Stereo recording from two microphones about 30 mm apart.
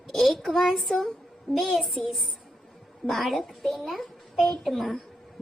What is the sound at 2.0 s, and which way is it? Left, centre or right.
A child's voice, centre.